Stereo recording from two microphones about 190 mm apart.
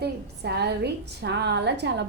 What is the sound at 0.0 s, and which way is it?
A woman's voice, 60° right (ahead or behind).